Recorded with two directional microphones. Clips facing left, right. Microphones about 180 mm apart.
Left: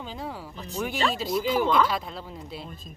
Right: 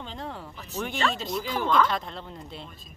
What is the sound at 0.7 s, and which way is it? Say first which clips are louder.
Speech: left 1 dB; 15° left (ahead or behind).